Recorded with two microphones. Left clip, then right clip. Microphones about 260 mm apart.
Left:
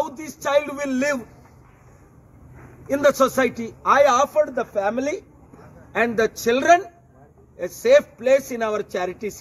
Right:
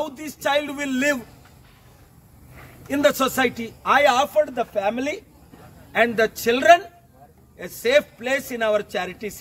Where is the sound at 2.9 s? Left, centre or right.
Centre.